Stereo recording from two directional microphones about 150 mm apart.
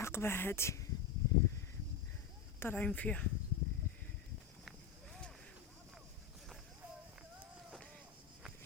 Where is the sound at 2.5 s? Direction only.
10° left (ahead or behind).